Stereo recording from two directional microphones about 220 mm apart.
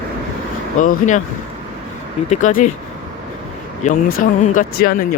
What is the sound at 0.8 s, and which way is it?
Speech, 35° left (ahead or behind).